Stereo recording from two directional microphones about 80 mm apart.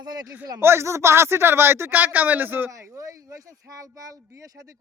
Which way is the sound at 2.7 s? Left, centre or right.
Right.